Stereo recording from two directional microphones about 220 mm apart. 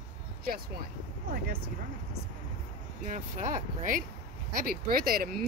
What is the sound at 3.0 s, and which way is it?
Speech, 35° right (ahead or behind).